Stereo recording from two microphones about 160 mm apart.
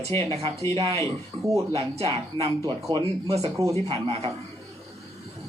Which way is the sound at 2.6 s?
20° right (ahead or behind).